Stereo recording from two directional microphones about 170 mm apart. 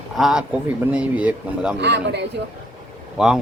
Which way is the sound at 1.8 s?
85° right.